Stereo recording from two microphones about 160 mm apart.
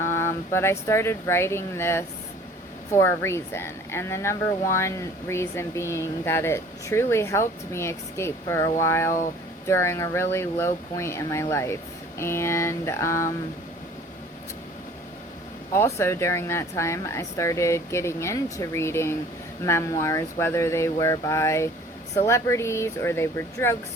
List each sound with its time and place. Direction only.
0.0 s speech: 15° left (ahead or behind)
15.7 s speech: 15° left (ahead or behind)